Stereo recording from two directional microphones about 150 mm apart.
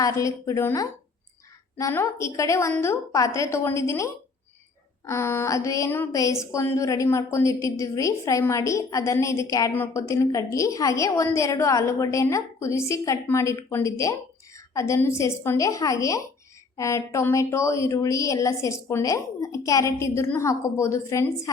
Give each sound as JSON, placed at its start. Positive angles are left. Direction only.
{"t": 0.0, "sound": "a woman's voice", "side_deg": 20}